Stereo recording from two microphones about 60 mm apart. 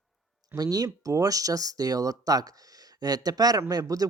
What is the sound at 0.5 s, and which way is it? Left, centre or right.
Speech, right.